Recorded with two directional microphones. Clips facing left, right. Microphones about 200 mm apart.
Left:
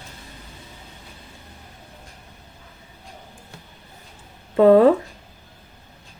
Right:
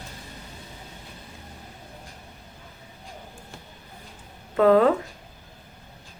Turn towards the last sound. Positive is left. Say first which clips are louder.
# left 5 dB
turn(degrees=25)  # may be behind; listen again after turning